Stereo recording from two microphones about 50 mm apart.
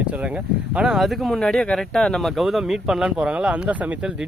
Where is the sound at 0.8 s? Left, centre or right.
Centre.